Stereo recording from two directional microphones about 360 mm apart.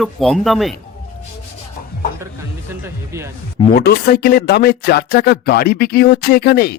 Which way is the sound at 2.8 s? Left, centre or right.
Centre.